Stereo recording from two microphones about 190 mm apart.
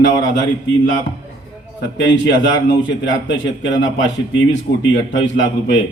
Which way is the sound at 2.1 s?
75° left (ahead or behind).